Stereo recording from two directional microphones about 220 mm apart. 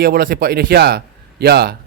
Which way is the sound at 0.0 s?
40° right (ahead or behind).